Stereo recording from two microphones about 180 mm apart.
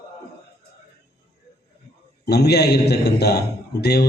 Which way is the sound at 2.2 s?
65° left (ahead or behind).